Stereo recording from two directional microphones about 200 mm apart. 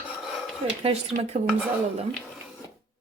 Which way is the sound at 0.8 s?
30° right (ahead or behind).